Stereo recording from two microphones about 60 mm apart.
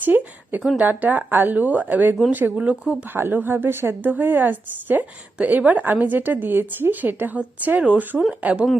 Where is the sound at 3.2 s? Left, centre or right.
Right.